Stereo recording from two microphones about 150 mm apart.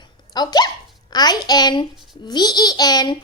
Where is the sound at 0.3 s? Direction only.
25° left (ahead or behind).